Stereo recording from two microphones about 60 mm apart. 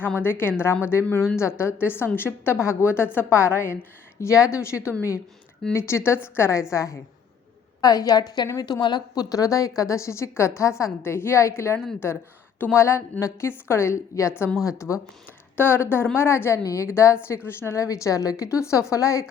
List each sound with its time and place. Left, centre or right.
0.2 s a woman's voice: left
6.5 s a woman's voice: left
7.8 s a woman's voice: left
11.0 s a woman's voice: left
14.5 s speech: centre
15.5 s a woman's voice: left
16.6 s a woman's voice: left
17.7 s a woman's voice: left